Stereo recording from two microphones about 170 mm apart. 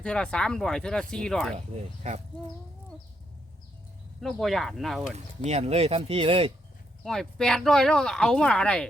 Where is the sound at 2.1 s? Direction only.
45° right (ahead or behind).